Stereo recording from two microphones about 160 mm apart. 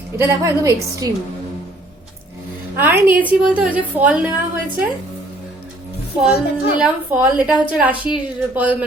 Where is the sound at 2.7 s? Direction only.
10° right (ahead or behind).